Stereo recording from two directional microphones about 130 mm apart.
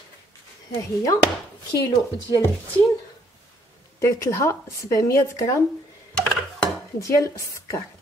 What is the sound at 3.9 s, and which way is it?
Speech, 25° left (ahead or behind).